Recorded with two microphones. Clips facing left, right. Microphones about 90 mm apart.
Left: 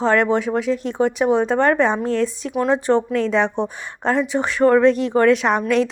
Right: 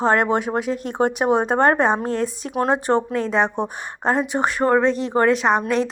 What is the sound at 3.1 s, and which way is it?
A woman's voice, 40° right (ahead or behind).